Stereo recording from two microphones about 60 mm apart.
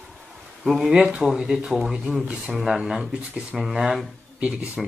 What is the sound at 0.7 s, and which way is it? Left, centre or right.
Speech, centre.